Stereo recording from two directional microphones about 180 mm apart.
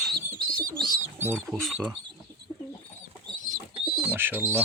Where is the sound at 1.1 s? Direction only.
10° right (ahead or behind).